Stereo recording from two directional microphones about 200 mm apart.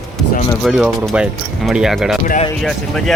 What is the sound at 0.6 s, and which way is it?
Speech, centre (ahead or behind).